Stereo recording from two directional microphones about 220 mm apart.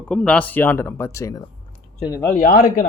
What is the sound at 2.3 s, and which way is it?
Speech, 40° left (ahead or behind).